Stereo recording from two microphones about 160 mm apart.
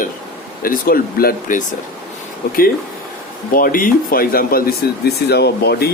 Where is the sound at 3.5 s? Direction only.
60° left (ahead or behind); by 5.8 s 90° left.